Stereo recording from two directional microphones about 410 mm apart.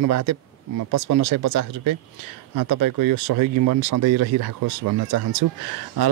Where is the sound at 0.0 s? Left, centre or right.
Right.